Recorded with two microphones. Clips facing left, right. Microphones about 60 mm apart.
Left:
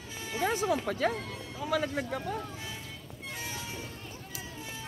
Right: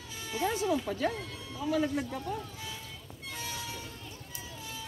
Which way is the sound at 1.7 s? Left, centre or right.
Left.